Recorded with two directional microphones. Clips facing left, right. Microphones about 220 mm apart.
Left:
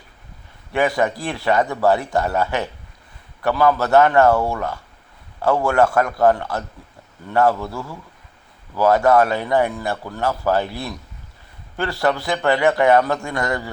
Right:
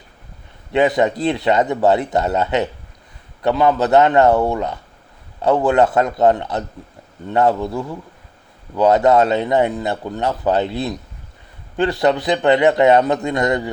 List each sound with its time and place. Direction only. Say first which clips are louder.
0.7 s a man's voice: right 4 dB; 20° right (ahead or behind)